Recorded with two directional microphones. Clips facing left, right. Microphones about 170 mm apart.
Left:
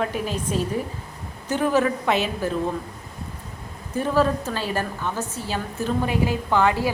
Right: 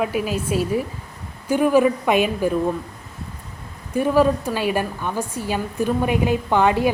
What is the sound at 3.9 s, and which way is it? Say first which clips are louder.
A woman's voice: right 4 dB; 15° right (ahead or behind).